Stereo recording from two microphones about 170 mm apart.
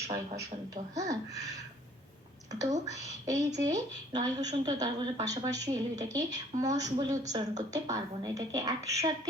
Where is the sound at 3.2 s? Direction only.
20° right (ahead or behind).